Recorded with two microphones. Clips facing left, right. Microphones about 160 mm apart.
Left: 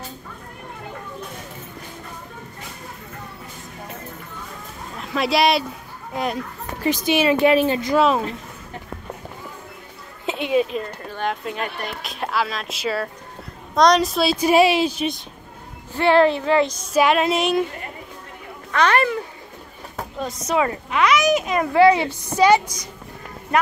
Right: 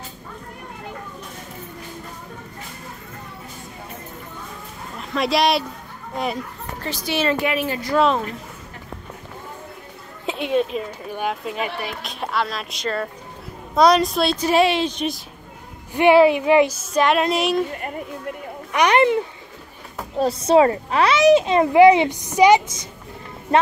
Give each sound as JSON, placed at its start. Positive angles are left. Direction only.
{"t": 4.9, "sound": "speech", "side_deg": 0}
{"t": 6.8, "sound": "speech", "side_deg": 20}
{"t": 7.3, "sound": "speech", "side_deg": 25}
{"t": 10.2, "sound": "a woman's voice", "side_deg": 0}
{"t": 15.9, "sound": "a woman's voice", "side_deg": -15}
{"t": 16.9, "sound": "speech", "side_deg": 5}
{"t": 18.7, "sound": "a child's voice", "side_deg": -15}
{"t": 20.2, "sound": "speech", "side_deg": -30}
{"t": 21.7, "sound": "a woman's voice", "side_deg": -15}